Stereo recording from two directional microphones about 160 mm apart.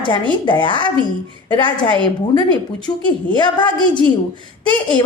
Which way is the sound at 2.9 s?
20° left (ahead or behind).